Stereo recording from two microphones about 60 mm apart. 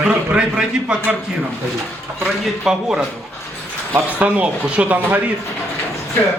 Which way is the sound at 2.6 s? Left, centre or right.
Centre.